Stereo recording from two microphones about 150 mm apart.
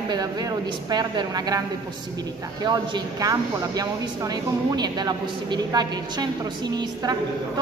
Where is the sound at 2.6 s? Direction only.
30° right (ahead or behind).